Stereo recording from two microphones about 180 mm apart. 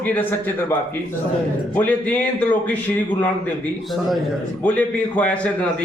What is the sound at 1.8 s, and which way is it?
A man's voice, 10° left (ahead or behind).